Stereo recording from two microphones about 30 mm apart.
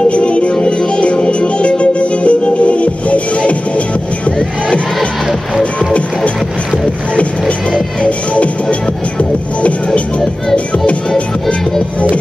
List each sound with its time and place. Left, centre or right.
0.1 s music: left
8.0 s music: left